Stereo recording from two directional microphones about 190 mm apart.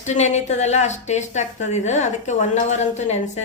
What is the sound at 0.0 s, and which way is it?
A woman's voice, 35° left (ahead or behind).